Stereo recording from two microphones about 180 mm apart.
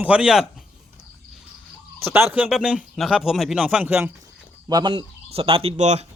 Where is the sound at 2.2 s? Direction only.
5° right (ahead or behind).